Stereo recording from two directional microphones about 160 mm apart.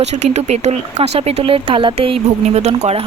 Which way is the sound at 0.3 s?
45° right (ahead or behind).